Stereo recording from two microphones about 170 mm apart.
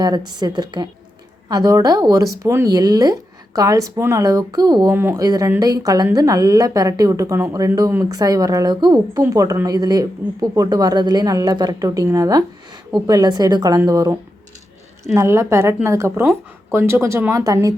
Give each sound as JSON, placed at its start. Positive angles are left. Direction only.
{"t": 0.0, "sound": "a woman's voice", "side_deg": -25}